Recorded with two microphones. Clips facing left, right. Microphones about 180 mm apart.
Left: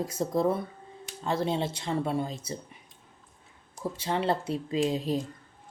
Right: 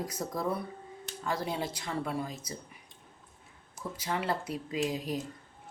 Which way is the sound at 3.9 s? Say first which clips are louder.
Left 4 dB; 30° left (ahead or behind).